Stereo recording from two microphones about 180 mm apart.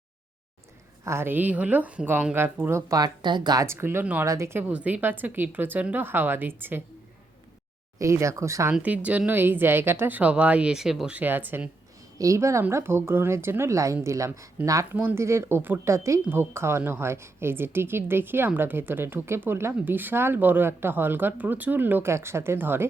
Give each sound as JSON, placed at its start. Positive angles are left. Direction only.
{"t": 1.0, "sound": "speech", "side_deg": -15}
{"t": 7.9, "sound": "speech", "side_deg": -15}